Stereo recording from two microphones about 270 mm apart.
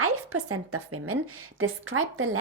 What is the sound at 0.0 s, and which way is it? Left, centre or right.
A woman's voice, right.